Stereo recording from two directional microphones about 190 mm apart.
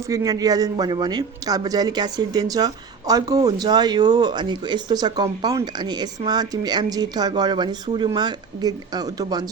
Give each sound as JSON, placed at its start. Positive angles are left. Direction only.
{"t": 0.1, "sound": "speech", "side_deg": -20}